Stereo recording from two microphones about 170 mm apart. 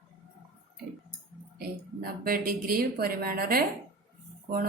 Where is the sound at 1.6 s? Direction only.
60° right (ahead or behind).